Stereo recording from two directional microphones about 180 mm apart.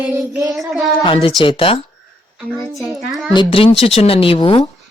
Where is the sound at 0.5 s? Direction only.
Centre (ahead or behind).